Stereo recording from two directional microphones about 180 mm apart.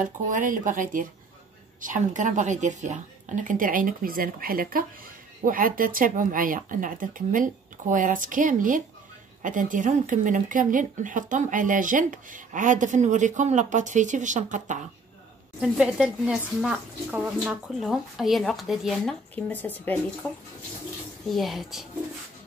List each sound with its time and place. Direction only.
0.0 s speech: 45° right (ahead or behind)
15.6 s speech: 5° right (ahead or behind)
19.3 s speech: 10° left (ahead or behind)
21.3 s speech: centre (ahead or behind)